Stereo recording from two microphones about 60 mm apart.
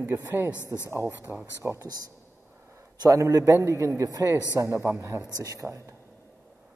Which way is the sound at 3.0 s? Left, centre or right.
Right.